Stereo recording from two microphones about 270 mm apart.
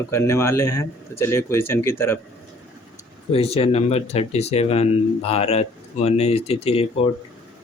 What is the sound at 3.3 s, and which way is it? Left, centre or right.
Speech, left.